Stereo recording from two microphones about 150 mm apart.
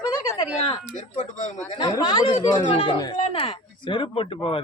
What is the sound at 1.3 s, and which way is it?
Speech, 50° left (ahead or behind).